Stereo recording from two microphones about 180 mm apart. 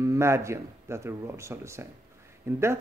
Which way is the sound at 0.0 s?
15° right (ahead or behind).